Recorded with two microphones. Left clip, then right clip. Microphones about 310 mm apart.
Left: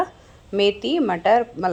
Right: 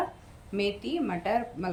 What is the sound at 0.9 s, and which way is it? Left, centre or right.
Speech, left.